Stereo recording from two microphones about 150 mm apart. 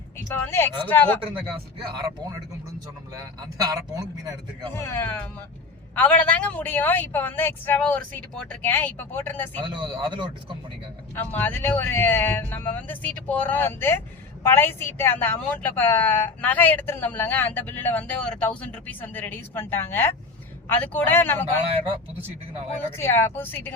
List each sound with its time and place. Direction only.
0.3 s a woman's voice: 15° left (ahead or behind)
1.2 s speech: 35° right (ahead or behind)
3.6 s speech: 25° right (ahead or behind)
4.7 s a woman's voice: 15° left (ahead or behind)
9.8 s speech: 30° right (ahead or behind)
11.1 s a woman's voice: 10° left (ahead or behind)
23.0 s a woman's voice: 15° left (ahead or behind)